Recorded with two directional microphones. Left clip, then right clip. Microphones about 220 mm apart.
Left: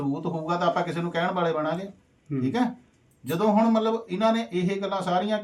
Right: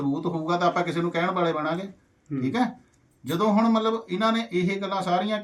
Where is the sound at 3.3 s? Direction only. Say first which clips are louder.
Even; centre (ahead or behind).